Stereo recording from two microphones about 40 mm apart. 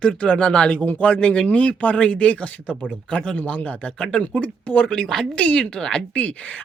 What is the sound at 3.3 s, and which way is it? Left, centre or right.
Speech, left.